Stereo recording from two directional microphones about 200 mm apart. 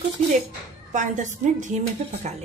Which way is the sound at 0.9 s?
40° right (ahead or behind).